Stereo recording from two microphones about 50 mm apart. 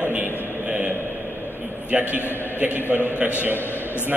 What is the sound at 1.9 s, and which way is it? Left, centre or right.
A man's voice, right.